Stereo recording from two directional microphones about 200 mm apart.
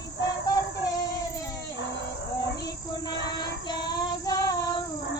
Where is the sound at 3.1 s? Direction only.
20° left (ahead or behind).